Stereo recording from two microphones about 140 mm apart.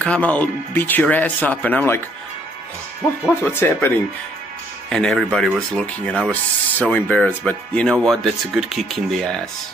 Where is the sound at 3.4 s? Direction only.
15° left (ahead or behind).